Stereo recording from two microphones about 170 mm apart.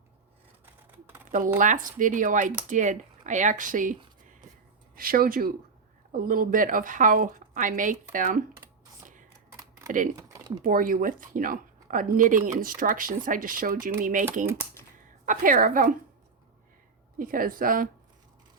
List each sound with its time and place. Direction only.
0.6 s a sound: 15° right (ahead or behind)
1.5 s speech: 50° right (ahead or behind)
4.9 s a woman's voice: 60° right (ahead or behind)
9.6 s typing: 20° right (ahead or behind)
10.6 s speech: 55° right (ahead or behind)
15.3 s speech: 50° right (ahead or behind)
17.2 s a woman's voice: 55° right (ahead or behind)